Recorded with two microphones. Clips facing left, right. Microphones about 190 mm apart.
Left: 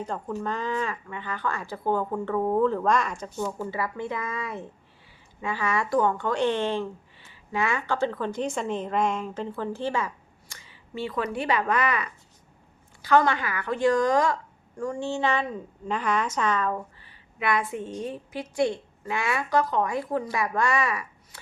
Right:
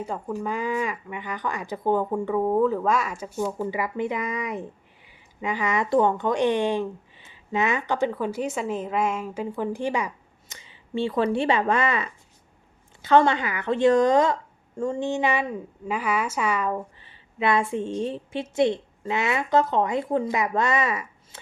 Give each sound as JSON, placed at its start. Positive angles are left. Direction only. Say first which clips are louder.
{"t": 0.0, "sound": "a woman's voice", "louder": "right 1 dB", "side_deg": -10}
{"t": 17.1, "sound": "a woman's voice", "louder": "right 4 dB", "side_deg": -25}